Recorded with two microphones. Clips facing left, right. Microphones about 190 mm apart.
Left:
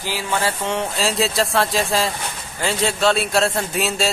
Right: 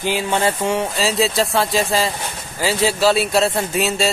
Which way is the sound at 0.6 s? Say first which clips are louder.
Right 3 dB; 5° right (ahead or behind).